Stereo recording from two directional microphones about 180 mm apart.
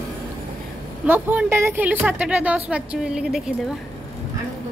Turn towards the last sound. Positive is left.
turn(degrees=-5)  # may be behind; listen again after turning